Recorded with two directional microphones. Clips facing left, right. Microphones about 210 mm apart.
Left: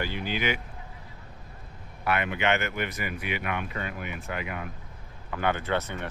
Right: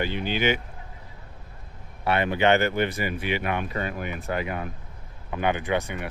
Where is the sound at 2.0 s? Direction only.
30° right (ahead or behind).